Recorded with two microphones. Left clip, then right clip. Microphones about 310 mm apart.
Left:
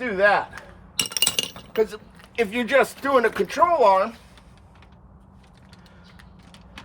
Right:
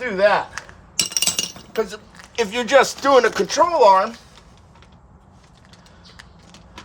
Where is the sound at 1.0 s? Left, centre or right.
Centre.